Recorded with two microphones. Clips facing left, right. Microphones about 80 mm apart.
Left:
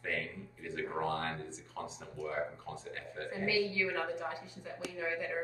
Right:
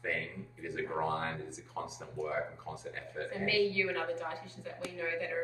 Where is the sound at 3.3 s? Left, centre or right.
Centre.